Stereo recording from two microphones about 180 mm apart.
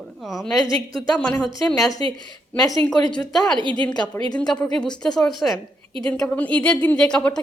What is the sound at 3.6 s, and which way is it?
Speech, 25° right (ahead or behind).